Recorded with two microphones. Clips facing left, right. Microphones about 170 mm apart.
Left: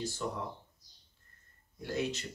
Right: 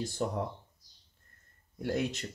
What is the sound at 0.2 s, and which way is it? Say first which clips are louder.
Speech: right 5 dB; 50° right (ahead or behind).